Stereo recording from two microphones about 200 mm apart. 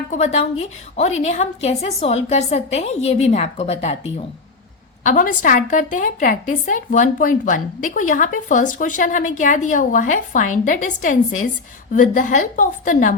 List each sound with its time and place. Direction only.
0.1 s a woman's voice: 35° left (ahead or behind)